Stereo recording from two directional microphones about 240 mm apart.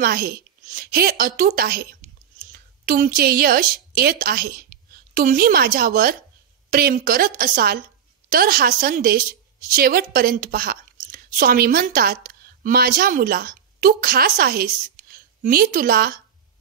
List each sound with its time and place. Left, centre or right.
0.0 s a woman's voice: right